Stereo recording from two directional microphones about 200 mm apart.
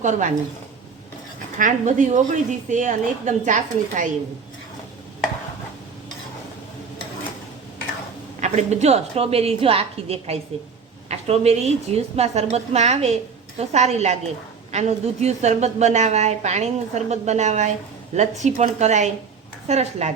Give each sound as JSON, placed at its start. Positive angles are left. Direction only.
{"t": 0.0, "sound": "a woman's voice", "side_deg": -40}
{"t": 1.5, "sound": "a woman's voice", "side_deg": -40}
{"t": 8.4, "sound": "a woman's voice", "side_deg": -35}